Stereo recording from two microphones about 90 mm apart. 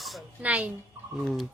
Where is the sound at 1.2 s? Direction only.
Centre (ahead or behind).